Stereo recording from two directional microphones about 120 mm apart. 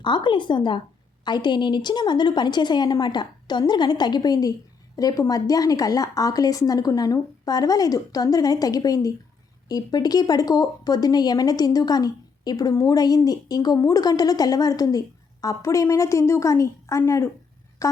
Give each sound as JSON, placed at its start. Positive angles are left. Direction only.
{"t": 0.0, "sound": "speech", "side_deg": 40}